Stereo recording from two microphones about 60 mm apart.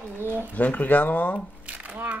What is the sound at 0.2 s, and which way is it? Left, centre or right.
Speech, right.